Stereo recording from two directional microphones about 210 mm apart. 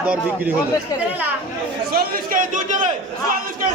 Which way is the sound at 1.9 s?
40° right (ahead or behind).